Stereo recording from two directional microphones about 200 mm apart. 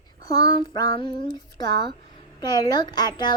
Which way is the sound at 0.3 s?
20° left (ahead or behind).